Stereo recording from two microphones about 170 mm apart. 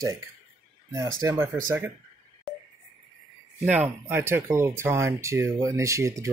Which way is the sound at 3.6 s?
10° right (ahead or behind).